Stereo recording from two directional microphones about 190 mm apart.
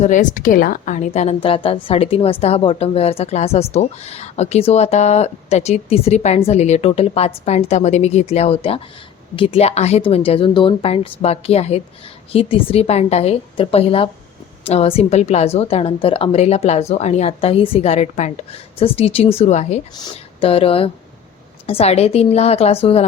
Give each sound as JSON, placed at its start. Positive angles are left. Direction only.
{"t": 0.0, "sound": "a woman's voice", "side_deg": 40}